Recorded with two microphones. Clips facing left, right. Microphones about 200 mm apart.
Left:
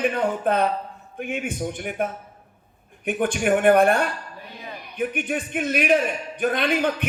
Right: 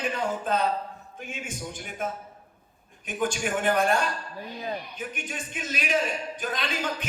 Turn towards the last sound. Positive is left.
turn(degrees=60)  # may be behind; listen again after turning